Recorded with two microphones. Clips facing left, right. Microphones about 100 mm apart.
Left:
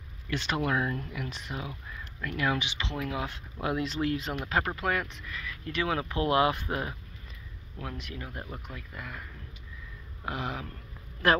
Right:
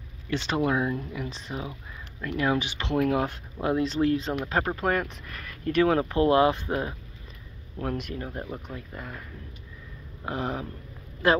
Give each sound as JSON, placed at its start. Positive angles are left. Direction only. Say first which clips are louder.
{"t": 0.3, "sound": "speech", "louder": "right 4 dB", "side_deg": -30}
{"t": 2.7, "sound": "speech", "louder": "right 9 dB", "side_deg": -50}
{"t": 3.6, "sound": "speech", "louder": "right 5 dB", "side_deg": -30}
{"t": 7.8, "sound": "speech", "louder": "right 8 dB", "side_deg": -45}
{"t": 8.6, "sound": "speech", "louder": "right 4 dB", "side_deg": -30}
{"t": 10.2, "sound": "speech", "louder": "right 4 dB", "side_deg": -35}
{"t": 11.2, "sound": "speech", "louder": "right 2 dB", "side_deg": -20}